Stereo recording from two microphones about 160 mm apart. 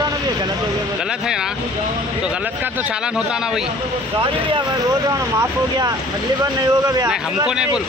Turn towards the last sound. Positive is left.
turn(degrees=-5)  # may be behind; listen again after turning